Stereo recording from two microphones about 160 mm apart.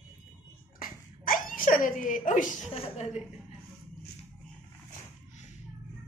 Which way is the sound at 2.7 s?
35° left (ahead or behind).